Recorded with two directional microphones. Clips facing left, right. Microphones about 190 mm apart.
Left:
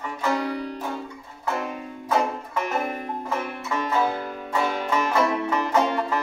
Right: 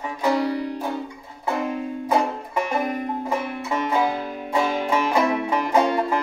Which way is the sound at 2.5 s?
15° right (ahead or behind).